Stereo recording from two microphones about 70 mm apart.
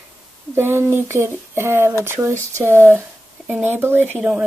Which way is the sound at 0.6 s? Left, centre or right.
Right.